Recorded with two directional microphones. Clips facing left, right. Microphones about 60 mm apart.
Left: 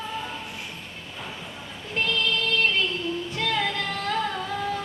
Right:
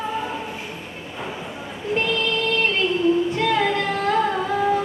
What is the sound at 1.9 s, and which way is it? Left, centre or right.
Music, centre.